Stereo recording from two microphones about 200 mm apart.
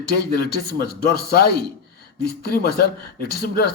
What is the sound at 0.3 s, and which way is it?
Speech, 50° left (ahead or behind).